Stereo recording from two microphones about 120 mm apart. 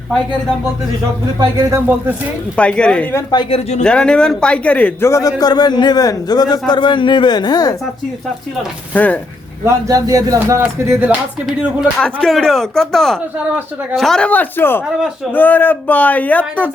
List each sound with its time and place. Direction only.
1.7 s speech: 15° right (ahead or behind)
2.6 s a man's voice: 10° left (ahead or behind)
3.5 s speech: 65° left (ahead or behind)
3.8 s a man's voice: 5° left (ahead or behind); by 5.3 s 25° left (ahead or behind)
5.4 s a man's voice: 35° left (ahead or behind)
8.9 s speech: 15° left (ahead or behind)
9.6 s speech: 30° right (ahead or behind)
10.6 s speech: 15° right (ahead or behind)
11.4 s a man's voice: 5° right (ahead or behind); by 16.6 s 10° left (ahead or behind)